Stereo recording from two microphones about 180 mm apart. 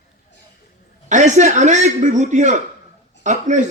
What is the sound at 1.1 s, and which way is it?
A man's voice, 40° right (ahead or behind).